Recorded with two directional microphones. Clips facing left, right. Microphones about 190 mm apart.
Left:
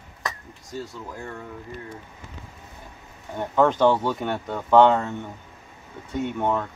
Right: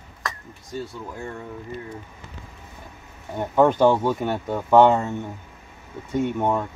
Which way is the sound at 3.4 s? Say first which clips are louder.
Right 2 dB; 10° right (ahead or behind).